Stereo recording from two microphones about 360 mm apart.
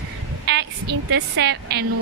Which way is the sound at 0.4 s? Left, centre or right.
Right.